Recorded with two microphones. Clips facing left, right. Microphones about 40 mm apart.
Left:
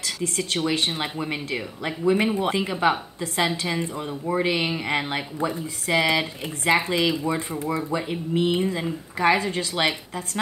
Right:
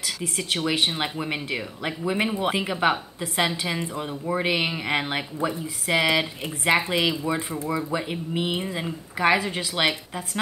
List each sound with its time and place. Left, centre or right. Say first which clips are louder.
0.0 s speech: left 2 dB; centre